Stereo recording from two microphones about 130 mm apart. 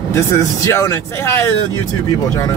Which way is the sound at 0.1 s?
20° left (ahead or behind).